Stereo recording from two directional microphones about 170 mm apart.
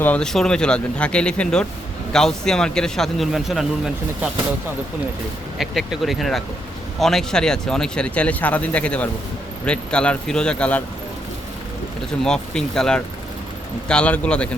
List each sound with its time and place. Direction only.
0.0 s a man's voice: 5° left (ahead or behind)
5.5 s a man's voice: centre (ahead or behind)
12.2 s a man's voice: 5° left (ahead or behind)